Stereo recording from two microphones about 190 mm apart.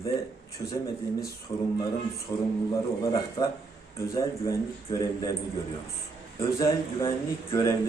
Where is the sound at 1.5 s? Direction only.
20° left (ahead or behind).